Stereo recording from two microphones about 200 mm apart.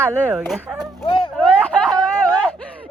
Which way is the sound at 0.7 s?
Centre (ahead or behind).